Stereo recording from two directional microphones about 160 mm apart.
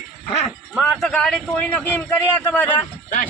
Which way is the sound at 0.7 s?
Centre (ahead or behind).